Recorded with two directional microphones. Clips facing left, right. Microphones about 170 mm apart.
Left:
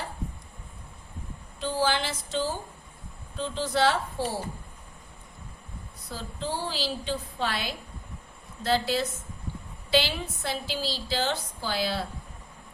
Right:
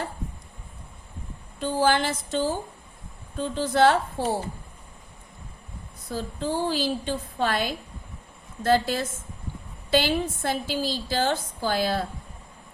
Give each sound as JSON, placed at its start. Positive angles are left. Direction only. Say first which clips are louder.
{"t": 1.5, "sound": "a woman's voice", "louder": "right 4 dB", "side_deg": -50}
{"t": 6.1, "sound": "a woman's voice", "louder": "right 5 dB", "side_deg": -50}